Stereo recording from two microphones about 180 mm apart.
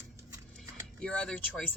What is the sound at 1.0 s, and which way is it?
Speech, 5° left (ahead or behind).